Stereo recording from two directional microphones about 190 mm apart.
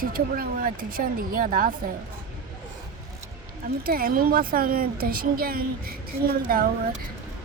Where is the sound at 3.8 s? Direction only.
50° right (ahead or behind).